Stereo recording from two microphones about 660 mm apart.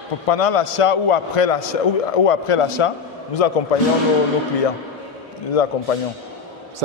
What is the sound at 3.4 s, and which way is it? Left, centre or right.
Speech, left.